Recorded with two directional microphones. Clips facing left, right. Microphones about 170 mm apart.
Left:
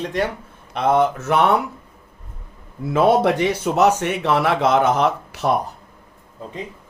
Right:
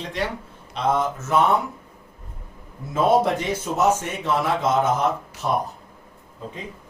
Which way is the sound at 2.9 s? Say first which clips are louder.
Left 3 dB; 75° left (ahead or behind).